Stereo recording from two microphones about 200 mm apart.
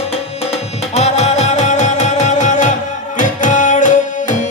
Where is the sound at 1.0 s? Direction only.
35° left (ahead or behind).